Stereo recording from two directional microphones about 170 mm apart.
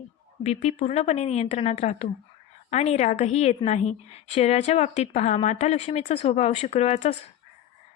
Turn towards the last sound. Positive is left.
turn(degrees=40)  # may be behind; listen again after turning